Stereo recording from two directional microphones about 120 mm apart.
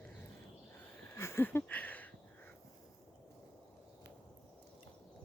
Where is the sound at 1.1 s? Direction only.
20° left (ahead or behind).